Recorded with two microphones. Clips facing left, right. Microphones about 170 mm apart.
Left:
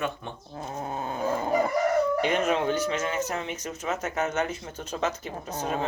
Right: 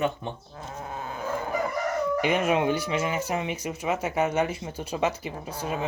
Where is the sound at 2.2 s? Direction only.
10° right (ahead or behind).